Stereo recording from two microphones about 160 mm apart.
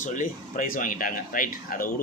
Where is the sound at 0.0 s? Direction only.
50° left (ahead or behind).